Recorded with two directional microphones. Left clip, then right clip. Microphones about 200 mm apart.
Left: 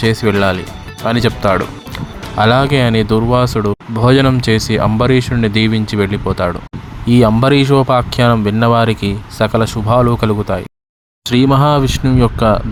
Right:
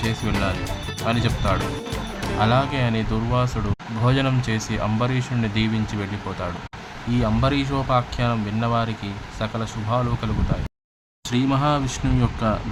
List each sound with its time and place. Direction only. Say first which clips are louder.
0.0 s speech: left 12 dB; 35° left (ahead or behind)